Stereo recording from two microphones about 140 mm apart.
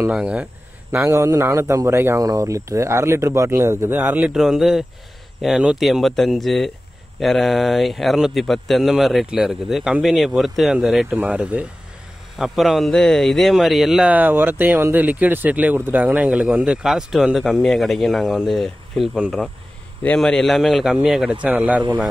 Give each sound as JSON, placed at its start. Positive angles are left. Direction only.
{"t": 0.1, "sound": "speech", "side_deg": -10}
{"t": 0.9, "sound": "a man's voice", "side_deg": -20}
{"t": 20.0, "sound": "speech", "side_deg": 10}